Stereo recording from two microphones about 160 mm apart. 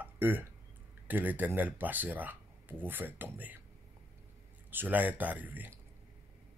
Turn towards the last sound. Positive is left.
turn(degrees=-10)  # may be behind; listen again after turning